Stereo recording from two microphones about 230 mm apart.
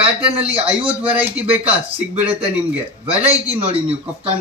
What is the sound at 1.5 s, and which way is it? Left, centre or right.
Speech, centre.